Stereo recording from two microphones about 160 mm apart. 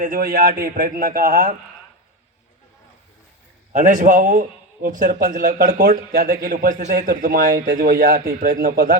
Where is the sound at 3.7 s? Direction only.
55° right (ahead or behind).